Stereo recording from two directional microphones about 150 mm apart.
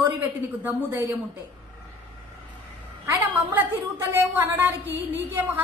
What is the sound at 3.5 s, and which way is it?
A woman's voice, 15° right (ahead or behind).